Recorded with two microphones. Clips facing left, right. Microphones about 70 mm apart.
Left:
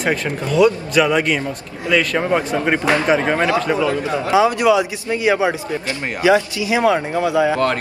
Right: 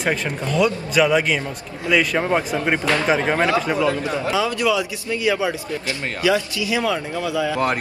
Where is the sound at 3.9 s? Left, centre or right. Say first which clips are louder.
Left 4 dB; left.